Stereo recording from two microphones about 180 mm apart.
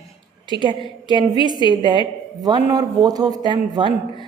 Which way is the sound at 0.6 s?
25° right (ahead or behind).